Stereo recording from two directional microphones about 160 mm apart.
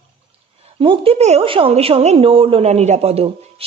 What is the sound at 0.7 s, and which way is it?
A woman's voice, 35° right (ahead or behind).